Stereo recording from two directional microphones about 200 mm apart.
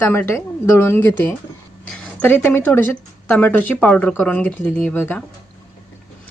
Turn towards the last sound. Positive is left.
turn(degrees=5)  # may be behind; listen again after turning